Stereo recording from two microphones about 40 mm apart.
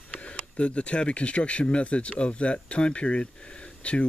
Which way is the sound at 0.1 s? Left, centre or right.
Left.